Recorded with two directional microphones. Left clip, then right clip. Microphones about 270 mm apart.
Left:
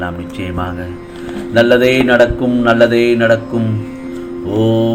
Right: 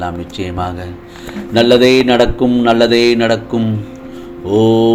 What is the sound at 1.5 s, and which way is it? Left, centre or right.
Speech, right.